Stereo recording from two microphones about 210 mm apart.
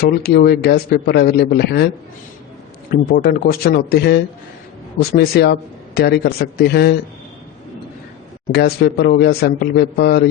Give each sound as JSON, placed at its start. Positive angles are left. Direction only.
{"t": 0.1, "sound": "a man's voice", "side_deg": 45}
{"t": 3.1, "sound": "a man's voice", "side_deg": 45}
{"t": 8.5, "sound": "a man's voice", "side_deg": 50}